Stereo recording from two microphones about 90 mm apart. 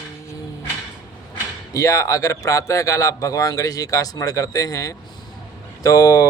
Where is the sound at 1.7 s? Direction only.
40° left (ahead or behind).